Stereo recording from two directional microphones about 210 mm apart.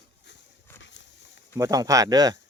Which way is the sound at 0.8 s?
60° left (ahead or behind).